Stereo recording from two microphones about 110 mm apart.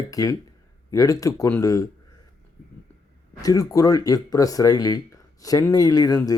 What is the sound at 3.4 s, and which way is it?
Speech, 35° left (ahead or behind).